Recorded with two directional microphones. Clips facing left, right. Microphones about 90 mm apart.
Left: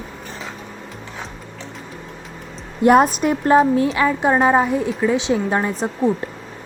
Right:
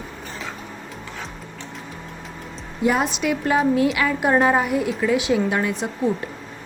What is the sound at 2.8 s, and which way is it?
A woman's voice, 50° left (ahead or behind).